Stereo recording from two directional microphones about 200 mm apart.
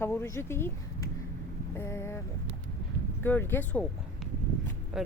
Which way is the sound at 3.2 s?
10° left (ahead or behind).